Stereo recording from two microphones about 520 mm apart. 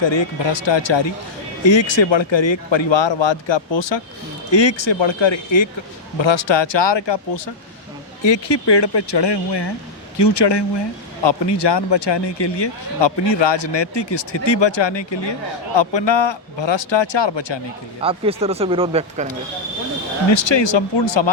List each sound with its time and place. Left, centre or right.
0.0 s speech: left
18.0 s speech: centre
20.3 s speech: left